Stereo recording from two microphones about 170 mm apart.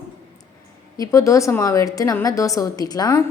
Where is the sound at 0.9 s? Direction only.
20° left (ahead or behind).